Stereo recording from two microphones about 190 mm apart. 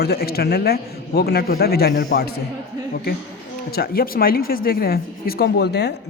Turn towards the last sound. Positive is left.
turn(degrees=60)  # may be behind; listen again after turning